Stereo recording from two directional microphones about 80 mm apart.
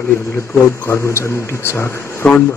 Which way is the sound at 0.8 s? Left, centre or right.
Left.